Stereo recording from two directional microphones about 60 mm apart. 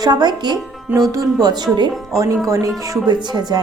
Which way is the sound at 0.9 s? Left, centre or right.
Right.